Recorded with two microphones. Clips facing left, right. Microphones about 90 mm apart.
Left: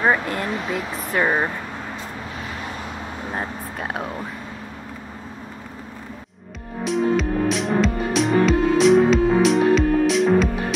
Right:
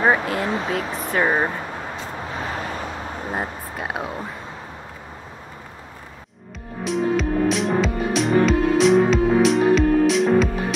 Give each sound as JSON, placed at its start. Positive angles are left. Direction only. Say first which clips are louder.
{"t": 0.0, "sound": "speech", "louder": "right 1 dB", "side_deg": -10}
{"t": 2.3, "sound": "vehicle", "louder": "right 6 dB", "side_deg": -35}
{"t": 3.3, "sound": "speech", "louder": "even", "side_deg": -5}
{"t": 6.8, "sound": "music", "louder": "left 1 dB", "side_deg": 0}